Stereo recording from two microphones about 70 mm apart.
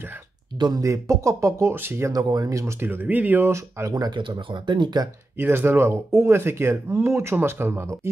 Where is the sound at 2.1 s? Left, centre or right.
Right.